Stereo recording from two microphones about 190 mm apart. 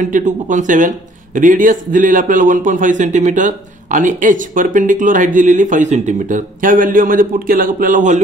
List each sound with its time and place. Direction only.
0.0 s speech: 40° right (ahead or behind)